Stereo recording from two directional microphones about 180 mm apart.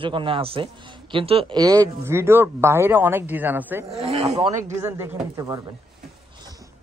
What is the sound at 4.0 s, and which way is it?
Speech, 35° right (ahead or behind).